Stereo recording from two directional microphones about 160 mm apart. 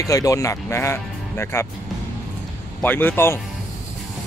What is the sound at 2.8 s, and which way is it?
Speech, 10° left (ahead or behind).